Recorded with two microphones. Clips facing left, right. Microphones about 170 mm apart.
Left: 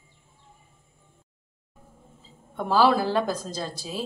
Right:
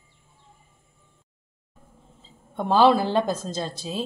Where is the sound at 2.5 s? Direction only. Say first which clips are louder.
Right 3 dB; 25° right (ahead or behind).